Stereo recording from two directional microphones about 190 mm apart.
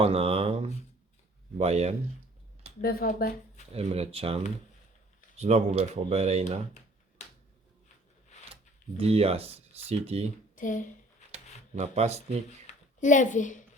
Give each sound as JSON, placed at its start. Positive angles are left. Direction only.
{"t": 0.0, "sound": "speech", "side_deg": -30}
{"t": 2.8, "sound": "speech", "side_deg": 50}
{"t": 3.8, "sound": "speech", "side_deg": -30}
{"t": 5.4, "sound": "speech", "side_deg": -35}
{"t": 7.2, "sound": "a sound", "side_deg": 35}
{"t": 9.0, "sound": "speech", "side_deg": -30}
{"t": 10.5, "sound": "speech", "side_deg": 45}
{"t": 11.8, "sound": "speech", "side_deg": -35}
{"t": 12.6, "sound": "a woman's voice", "side_deg": 40}